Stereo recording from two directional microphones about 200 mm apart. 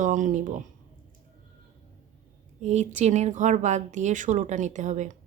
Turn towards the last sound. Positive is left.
turn(degrees=-35)  # may be behind; listen again after turning